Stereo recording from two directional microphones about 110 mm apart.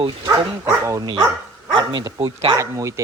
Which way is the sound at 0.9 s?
35° right (ahead or behind).